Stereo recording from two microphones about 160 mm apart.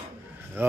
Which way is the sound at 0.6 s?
10° right (ahead or behind).